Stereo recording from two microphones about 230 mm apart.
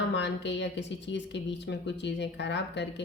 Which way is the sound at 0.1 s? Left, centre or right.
Left.